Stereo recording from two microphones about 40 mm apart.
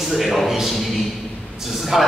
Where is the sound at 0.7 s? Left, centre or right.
Centre.